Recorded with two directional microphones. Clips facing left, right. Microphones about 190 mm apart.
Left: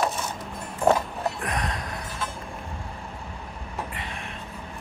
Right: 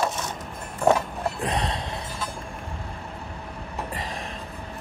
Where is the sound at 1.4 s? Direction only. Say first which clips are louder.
Right 3 dB; 30° right (ahead or behind).